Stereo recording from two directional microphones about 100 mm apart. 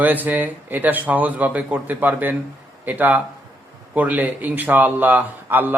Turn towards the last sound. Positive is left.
turn(degrees=-20)  # may be behind; listen again after turning